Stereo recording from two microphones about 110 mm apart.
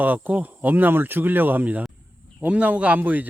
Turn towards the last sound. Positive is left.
turn(degrees=-15)  # may be behind; listen again after turning